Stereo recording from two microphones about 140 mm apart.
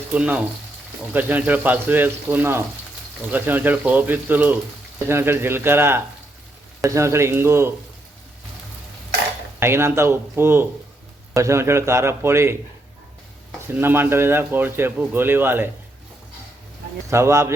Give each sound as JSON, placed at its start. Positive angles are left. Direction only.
{"t": 0.1, "sound": "a man's voice", "side_deg": -10}
{"t": 9.6, "sound": "a man's voice", "side_deg": -15}
{"t": 13.7, "sound": "a man's voice", "side_deg": -15}
{"t": 17.1, "sound": "a man's voice", "side_deg": -20}